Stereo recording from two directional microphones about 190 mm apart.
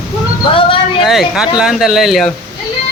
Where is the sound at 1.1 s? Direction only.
Centre (ahead or behind).